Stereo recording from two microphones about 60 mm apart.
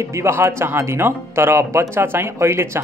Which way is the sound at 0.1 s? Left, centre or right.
Right.